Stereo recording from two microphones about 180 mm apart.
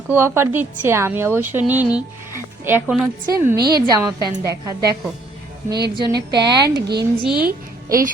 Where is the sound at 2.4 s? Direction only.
15° right (ahead or behind).